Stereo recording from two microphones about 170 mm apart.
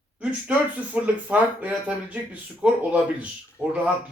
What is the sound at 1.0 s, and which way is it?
Speech, 10° right (ahead or behind).